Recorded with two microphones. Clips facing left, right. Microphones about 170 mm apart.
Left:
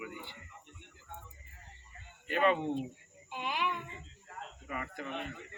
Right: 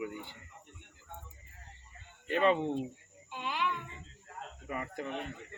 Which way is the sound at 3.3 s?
15° left (ahead or behind).